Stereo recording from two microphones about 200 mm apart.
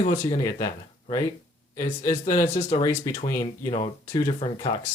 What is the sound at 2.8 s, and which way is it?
Speech, 10° left (ahead or behind).